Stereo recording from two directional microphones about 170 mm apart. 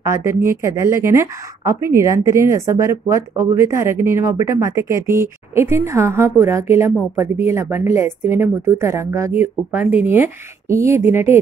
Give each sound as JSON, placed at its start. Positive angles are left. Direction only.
{"t": 0.0, "sound": "speech", "side_deg": -15}